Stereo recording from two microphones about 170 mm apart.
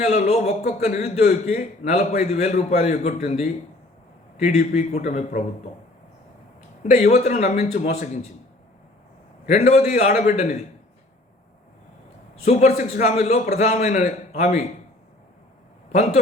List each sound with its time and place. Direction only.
0.0 s a man's voice: 40° left (ahead or behind)
6.8 s a man's voice: 40° left (ahead or behind)
9.5 s a man's voice: 40° left (ahead or behind)
12.5 s a man's voice: 45° left (ahead or behind)
15.9 s a man's voice: 45° left (ahead or behind)